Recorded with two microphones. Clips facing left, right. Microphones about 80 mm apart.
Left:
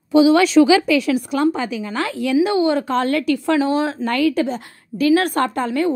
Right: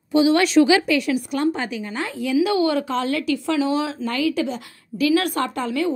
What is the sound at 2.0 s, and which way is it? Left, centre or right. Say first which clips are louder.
Speech: left 5 dB; left.